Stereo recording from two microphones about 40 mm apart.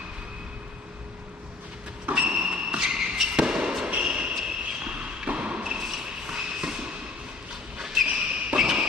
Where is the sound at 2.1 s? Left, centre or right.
Right.